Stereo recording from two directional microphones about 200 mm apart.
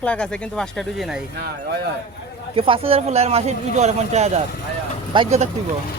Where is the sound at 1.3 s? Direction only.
55° right (ahead or behind).